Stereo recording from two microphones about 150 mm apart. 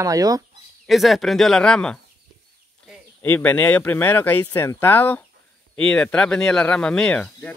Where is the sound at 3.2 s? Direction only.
10° left (ahead or behind).